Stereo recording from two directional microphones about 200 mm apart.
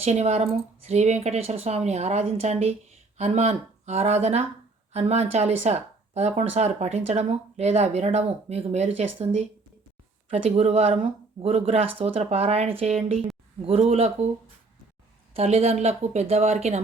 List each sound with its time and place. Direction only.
0.0 s speech: 35° right (ahead or behind)
15.3 s speech: 30° right (ahead or behind)